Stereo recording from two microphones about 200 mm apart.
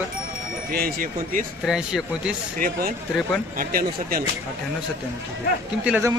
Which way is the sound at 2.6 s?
50° right (ahead or behind).